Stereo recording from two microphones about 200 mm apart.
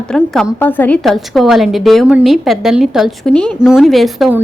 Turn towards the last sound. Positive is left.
turn(degrees=0)  # may be behind; listen again after turning